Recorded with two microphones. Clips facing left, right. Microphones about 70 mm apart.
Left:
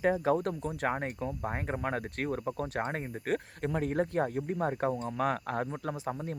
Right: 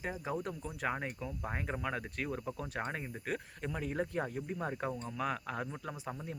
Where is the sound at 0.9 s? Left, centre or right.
Left.